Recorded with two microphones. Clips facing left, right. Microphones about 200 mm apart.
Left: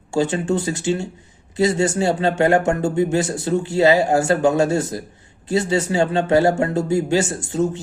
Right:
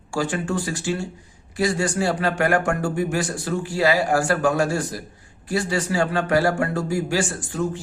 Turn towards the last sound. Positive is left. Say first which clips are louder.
# left 5 dB
turn(degrees=25)  # may be behind; listen again after turning